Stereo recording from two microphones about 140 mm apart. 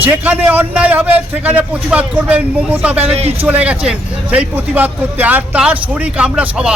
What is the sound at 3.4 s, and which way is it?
A man's voice, 10° right (ahead or behind).